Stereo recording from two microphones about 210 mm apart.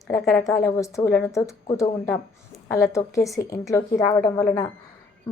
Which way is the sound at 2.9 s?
15° left (ahead or behind).